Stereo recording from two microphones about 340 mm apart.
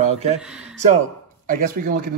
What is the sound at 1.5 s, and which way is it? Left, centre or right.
Speech, right.